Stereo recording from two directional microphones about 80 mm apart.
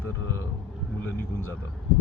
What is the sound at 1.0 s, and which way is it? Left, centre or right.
Speech, left.